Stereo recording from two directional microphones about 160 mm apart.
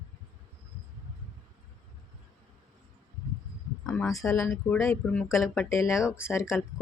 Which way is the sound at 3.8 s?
5° left (ahead or behind).